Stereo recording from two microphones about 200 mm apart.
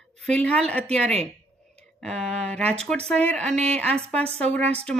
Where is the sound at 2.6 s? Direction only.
30° right (ahead or behind).